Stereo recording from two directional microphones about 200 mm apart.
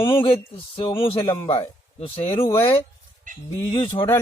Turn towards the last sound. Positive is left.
turn(degrees=25)  # may be behind; listen again after turning